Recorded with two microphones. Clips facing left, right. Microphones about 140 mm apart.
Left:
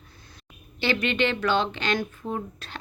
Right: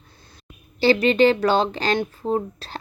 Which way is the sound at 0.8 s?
35° right (ahead or behind).